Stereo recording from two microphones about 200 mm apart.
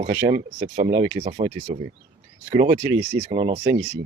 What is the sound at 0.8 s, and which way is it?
Speech, 30° right (ahead or behind).